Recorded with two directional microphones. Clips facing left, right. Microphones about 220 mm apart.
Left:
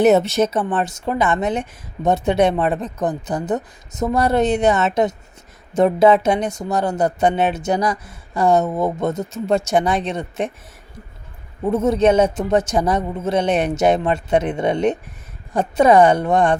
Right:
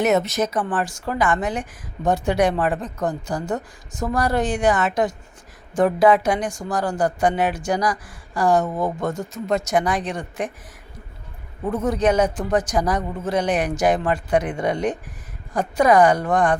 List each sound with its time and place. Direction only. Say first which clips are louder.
0.0 s speech: left 5 dB; 30° left (ahead or behind)
11.6 s speech: left 5 dB; 25° left (ahead or behind)